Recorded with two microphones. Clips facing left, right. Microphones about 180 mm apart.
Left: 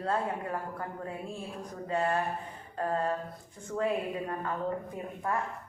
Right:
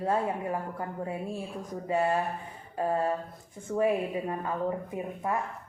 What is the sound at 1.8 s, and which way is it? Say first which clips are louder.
A woman's voice: right 2 dB; 15° right (ahead or behind).